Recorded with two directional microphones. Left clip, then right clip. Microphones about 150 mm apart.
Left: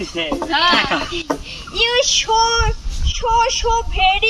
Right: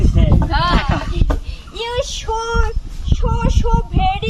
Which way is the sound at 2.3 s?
20° right (ahead or behind).